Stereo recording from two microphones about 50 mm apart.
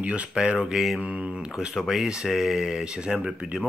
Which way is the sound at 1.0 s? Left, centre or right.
Right.